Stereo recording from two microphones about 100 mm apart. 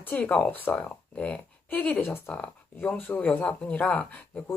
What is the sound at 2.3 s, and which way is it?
Speech, 10° left (ahead or behind).